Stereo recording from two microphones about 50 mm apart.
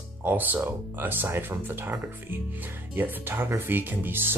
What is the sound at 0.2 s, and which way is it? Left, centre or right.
Speech, right.